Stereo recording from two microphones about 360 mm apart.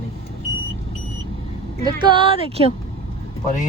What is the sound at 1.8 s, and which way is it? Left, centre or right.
Speech, centre.